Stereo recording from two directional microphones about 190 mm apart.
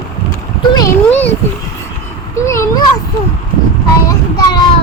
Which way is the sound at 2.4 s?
15° left (ahead or behind).